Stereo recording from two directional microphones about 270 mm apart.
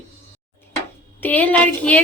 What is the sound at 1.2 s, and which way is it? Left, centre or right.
Speech, centre.